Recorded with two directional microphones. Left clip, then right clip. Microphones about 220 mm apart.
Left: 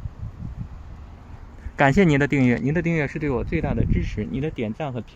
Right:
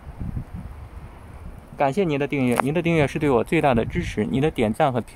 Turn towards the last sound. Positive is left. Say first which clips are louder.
# right 8 dB
turn(degrees=-15)  # may be behind; listen again after turning